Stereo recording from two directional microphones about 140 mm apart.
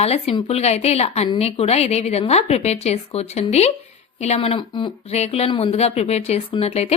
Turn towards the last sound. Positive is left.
turn(degrees=45)  # may be behind; listen again after turning